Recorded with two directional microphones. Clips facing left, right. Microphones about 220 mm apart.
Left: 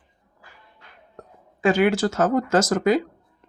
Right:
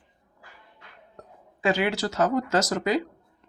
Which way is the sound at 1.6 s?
50° left (ahead or behind).